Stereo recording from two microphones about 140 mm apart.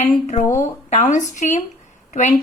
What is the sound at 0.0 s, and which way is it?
A woman's voice, 50° left (ahead or behind).